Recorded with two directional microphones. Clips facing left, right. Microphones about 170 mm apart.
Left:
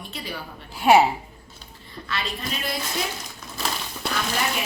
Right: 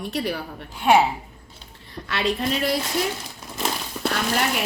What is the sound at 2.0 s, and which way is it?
Speech, 70° right (ahead or behind).